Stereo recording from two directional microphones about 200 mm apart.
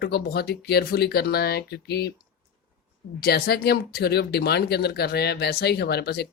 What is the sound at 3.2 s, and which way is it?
Speech, 50° left (ahead or behind).